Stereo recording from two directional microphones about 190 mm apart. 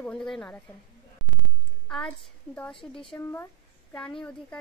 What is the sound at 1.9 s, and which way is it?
Speech, 5° left (ahead or behind).